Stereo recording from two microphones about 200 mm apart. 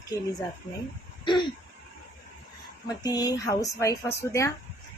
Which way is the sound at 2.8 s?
20° left (ahead or behind).